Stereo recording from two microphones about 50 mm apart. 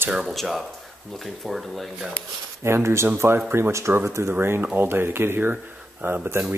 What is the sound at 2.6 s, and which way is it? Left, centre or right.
Speech, right.